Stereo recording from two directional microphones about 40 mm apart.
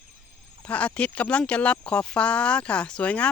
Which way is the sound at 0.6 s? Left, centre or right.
Left.